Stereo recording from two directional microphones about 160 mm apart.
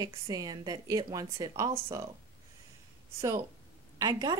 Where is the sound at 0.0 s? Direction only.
25° right (ahead or behind).